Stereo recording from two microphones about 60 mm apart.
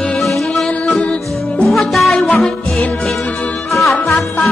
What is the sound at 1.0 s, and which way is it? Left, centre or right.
Music, left.